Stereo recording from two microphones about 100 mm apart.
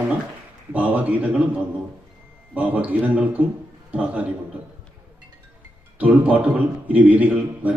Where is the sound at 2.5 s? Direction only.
15° right (ahead or behind).